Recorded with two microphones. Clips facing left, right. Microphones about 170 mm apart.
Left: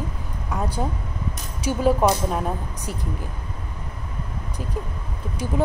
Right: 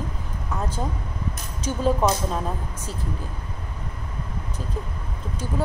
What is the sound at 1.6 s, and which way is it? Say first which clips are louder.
Speech: left 3 dB; 10° left (ahead or behind).